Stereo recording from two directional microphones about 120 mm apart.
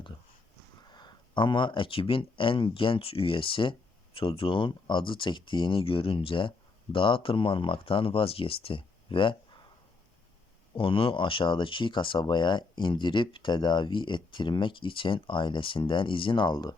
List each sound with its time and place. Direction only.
0.9 s speech: 40° left (ahead or behind)
10.8 s speech: 45° left (ahead or behind)